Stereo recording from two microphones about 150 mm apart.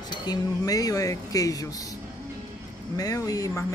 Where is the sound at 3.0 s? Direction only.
25° left (ahead or behind).